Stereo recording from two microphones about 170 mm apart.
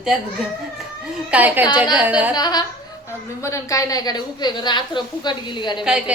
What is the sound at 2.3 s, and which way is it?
A woman's voice, 25° left (ahead or behind).